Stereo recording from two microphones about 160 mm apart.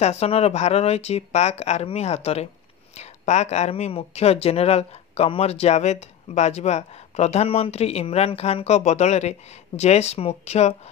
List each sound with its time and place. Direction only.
0.0 s speech: 40° left (ahead or behind)